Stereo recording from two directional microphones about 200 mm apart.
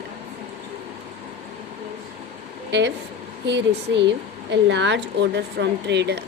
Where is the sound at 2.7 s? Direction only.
60° right (ahead or behind).